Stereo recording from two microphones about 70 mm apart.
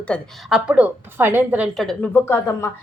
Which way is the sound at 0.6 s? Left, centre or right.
Right.